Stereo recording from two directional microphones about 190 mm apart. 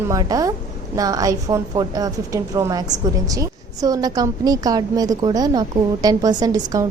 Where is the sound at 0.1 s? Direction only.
20° right (ahead or behind).